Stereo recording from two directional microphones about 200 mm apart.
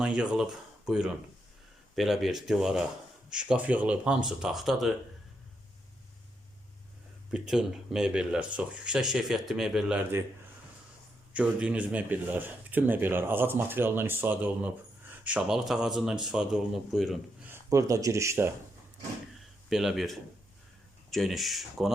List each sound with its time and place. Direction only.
0.0 s speech: 5° right (ahead or behind)
7.3 s speech: 5° right (ahead or behind)
11.3 s speech: 5° right (ahead or behind)
17.7 s speech: 15° right (ahead or behind)
19.7 s speech: centre (ahead or behind)